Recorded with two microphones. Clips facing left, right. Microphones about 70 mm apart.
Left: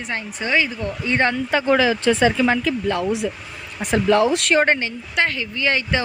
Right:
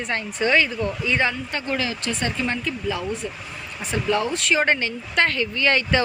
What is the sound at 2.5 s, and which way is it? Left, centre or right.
Speech, left.